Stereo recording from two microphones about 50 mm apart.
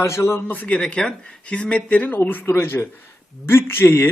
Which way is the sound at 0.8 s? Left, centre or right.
Centre.